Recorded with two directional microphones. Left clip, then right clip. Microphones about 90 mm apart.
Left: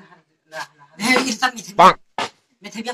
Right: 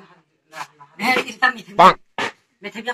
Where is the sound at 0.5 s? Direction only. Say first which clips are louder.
Left 1 dB; 50° right (ahead or behind).